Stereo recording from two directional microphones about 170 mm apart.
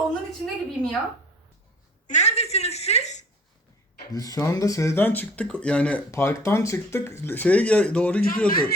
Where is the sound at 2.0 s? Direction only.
40° left (ahead or behind).